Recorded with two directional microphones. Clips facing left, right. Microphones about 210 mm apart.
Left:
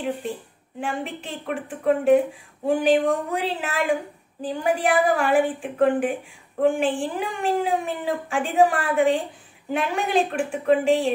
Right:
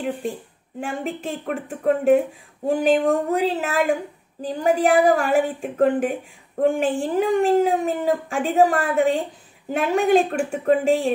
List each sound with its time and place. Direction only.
0.7 s speech: 40° right (ahead or behind)